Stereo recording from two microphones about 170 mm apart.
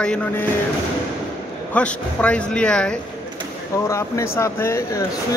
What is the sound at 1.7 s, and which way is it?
Speech, 5° left (ahead or behind).